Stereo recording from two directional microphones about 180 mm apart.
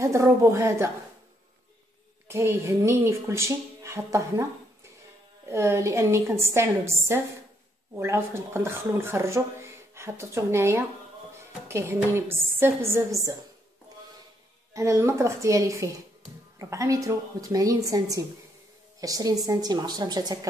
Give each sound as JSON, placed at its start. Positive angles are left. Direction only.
{"t": 0.0, "sound": "speech", "side_deg": -15}
{"t": 2.2, "sound": "speech", "side_deg": -15}
{"t": 5.5, "sound": "speech", "side_deg": -15}
{"t": 14.7, "sound": "a woman's voice", "side_deg": -15}